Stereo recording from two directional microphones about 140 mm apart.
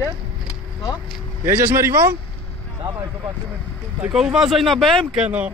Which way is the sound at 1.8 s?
20° right (ahead or behind).